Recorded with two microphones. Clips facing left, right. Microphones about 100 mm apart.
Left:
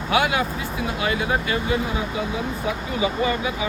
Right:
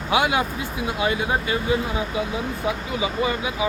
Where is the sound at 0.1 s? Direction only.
20° right (ahead or behind).